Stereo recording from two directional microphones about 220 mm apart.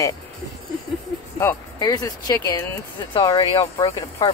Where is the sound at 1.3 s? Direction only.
15° left (ahead or behind).